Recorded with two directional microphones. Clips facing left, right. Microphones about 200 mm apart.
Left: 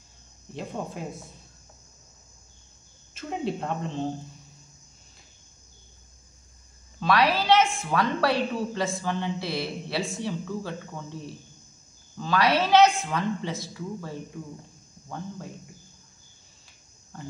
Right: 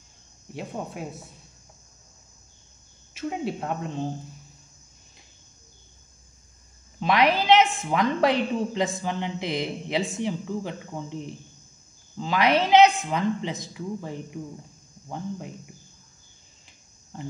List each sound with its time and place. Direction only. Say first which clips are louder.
3.2 s speech: right 1 dB; 5° right (ahead or behind)
7.0 s a woman's voice: right 1 dB; 20° right (ahead or behind)